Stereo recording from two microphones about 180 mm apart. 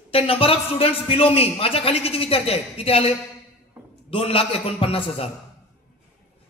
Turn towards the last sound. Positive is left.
turn(degrees=30)  # may be behind; listen again after turning